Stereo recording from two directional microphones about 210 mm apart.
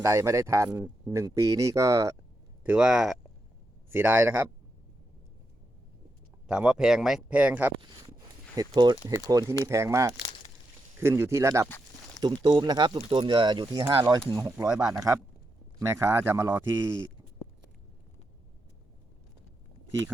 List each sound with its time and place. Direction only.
0.0 s speech: 15° right (ahead or behind)
2.6 s speech: 5° right (ahead or behind)
6.5 s speech: 5° right (ahead or behind)
7.8 s speech: 20° right (ahead or behind)